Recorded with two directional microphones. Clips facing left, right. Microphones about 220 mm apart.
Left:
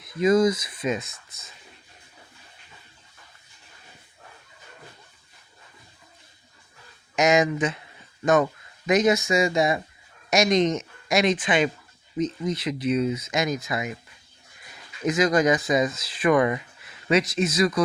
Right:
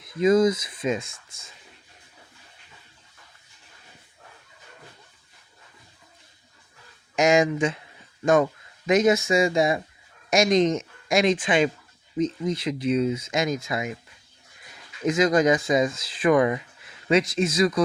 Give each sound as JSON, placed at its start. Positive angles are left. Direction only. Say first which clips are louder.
{"t": 0.1, "sound": "speech", "louder": "right 1 dB", "side_deg": -25}
{"t": 7.2, "sound": "speech", "louder": "right 1 dB", "side_deg": -30}
{"t": 15.0, "sound": "speech", "louder": "right 1 dB", "side_deg": -25}